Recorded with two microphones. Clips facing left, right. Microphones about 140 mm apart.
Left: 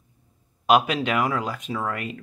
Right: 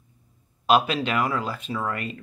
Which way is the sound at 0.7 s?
15° left (ahead or behind).